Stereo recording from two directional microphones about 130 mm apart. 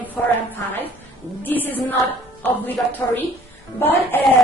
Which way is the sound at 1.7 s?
15° left (ahead or behind).